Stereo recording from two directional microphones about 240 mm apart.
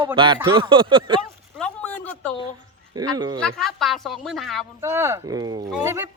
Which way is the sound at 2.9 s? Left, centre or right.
Centre.